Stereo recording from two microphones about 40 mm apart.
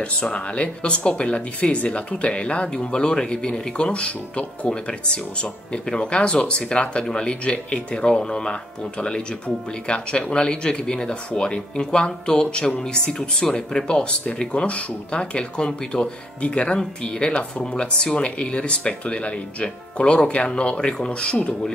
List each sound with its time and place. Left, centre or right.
0.0 s speech: left